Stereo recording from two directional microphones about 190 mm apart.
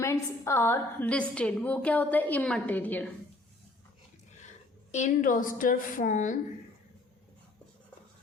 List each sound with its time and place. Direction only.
0.0 s a woman's voice: 15° left (ahead or behind)
4.9 s a woman's voice: 40° left (ahead or behind)